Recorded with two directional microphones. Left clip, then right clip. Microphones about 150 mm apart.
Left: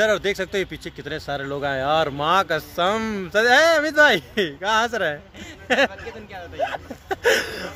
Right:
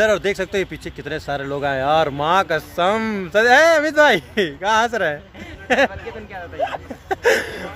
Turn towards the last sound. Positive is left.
turn(degrees=10)  # may be behind; listen again after turning